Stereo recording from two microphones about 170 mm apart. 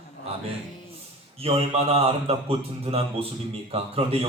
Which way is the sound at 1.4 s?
35° right (ahead or behind).